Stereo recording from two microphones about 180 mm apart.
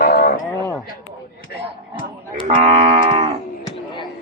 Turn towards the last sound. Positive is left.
turn(degrees=25)  # may be behind; listen again after turning